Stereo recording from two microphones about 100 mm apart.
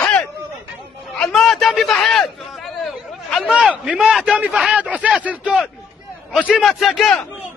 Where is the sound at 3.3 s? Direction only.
10° right (ahead or behind).